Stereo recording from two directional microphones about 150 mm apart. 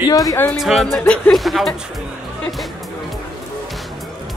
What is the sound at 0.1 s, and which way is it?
Speech, 25° left (ahead or behind).